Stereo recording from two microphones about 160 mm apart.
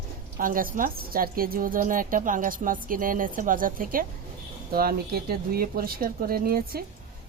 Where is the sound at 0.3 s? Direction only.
60° right (ahead or behind).